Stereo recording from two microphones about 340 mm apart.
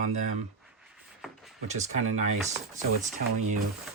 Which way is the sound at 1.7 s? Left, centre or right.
Centre.